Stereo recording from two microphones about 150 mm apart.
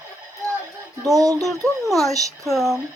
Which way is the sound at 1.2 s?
20° right (ahead or behind).